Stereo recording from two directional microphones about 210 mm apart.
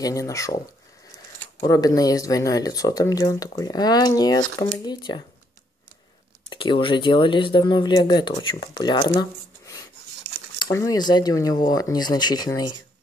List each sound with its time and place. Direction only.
0.0 s speech: 15° left (ahead or behind)
1.7 s speech: 15° left (ahead or behind)
6.5 s speech: 25° left (ahead or behind)